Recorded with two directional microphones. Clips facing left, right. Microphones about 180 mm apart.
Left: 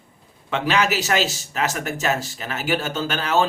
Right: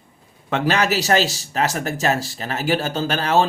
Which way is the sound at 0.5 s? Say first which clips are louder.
Right 2 dB; 40° right (ahead or behind).